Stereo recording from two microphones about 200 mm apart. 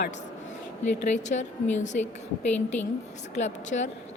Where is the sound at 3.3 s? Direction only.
35° left (ahead or behind).